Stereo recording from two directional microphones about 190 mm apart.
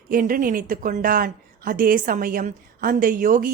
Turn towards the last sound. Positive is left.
turn(degrees=-45)  # may be behind; listen again after turning